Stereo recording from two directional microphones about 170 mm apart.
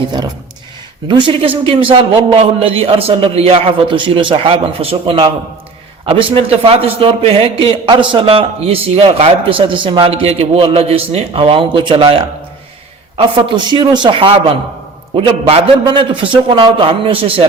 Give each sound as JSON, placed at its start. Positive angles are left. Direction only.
{"t": 1.0, "sound": "a man's voice", "side_deg": -30}